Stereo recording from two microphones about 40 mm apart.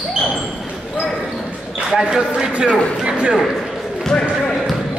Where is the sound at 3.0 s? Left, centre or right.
Right.